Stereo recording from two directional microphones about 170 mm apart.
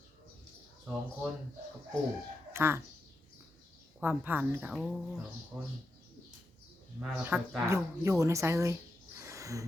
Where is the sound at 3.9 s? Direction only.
10° right (ahead or behind).